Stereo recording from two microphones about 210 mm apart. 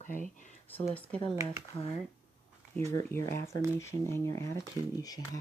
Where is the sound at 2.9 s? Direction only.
15° left (ahead or behind).